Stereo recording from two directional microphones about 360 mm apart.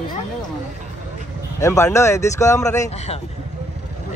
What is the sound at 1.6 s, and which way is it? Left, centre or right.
Speech, centre.